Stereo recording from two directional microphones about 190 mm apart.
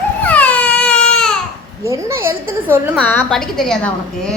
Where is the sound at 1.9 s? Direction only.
15° right (ahead or behind).